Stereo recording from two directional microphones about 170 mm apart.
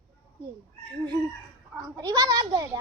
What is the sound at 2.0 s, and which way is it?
Speech, 25° right (ahead or behind).